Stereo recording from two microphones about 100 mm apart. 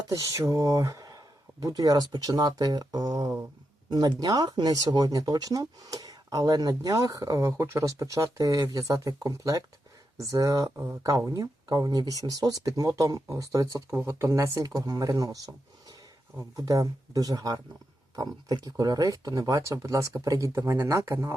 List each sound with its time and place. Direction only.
0.1 s speech: 35° right (ahead or behind)